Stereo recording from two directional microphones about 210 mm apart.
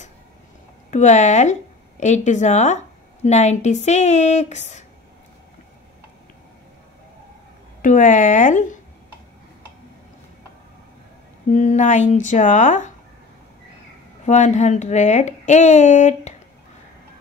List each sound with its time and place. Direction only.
0.8 s a woman's voice: 35° left (ahead or behind)
7.8 s speech: 40° left (ahead or behind)
11.4 s speech: 35° left (ahead or behind)
14.2 s speech: 35° left (ahead or behind)